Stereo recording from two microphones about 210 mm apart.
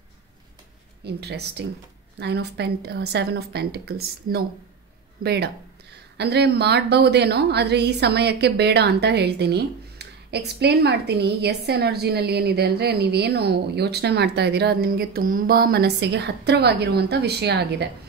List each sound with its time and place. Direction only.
1.0 s speech: 50° right (ahead or behind)